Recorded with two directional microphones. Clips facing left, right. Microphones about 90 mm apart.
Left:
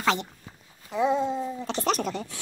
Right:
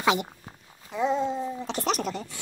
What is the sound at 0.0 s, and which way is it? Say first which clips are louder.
Speech: right 1 dB; 10° right (ahead or behind).